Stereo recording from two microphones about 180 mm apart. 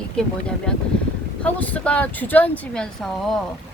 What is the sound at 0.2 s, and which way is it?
Speech, 5° left (ahead or behind).